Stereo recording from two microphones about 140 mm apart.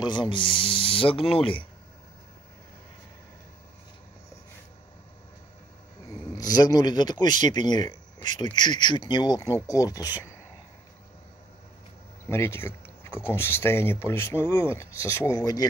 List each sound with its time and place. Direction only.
0.0 s speech: 35° left (ahead or behind)
6.3 s speech: 30° left (ahead or behind)
12.3 s speech: 15° left (ahead or behind)